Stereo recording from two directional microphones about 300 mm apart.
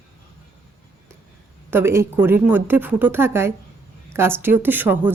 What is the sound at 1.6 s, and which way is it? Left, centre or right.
Speech, centre.